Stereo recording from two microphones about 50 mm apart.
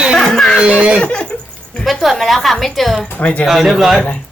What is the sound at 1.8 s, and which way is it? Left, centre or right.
A woman's voice, centre.